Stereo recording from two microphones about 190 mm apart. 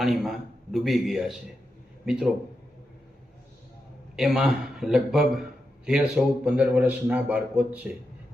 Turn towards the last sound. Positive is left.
turn(degrees=-5)  # may be behind; listen again after turning